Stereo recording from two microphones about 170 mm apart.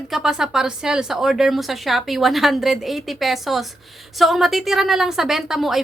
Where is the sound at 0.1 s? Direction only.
5° right (ahead or behind).